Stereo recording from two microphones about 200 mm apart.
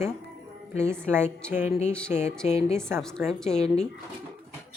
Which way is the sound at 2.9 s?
5° left (ahead or behind).